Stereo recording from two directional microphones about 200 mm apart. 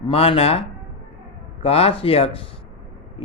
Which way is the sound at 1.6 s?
30° left (ahead or behind).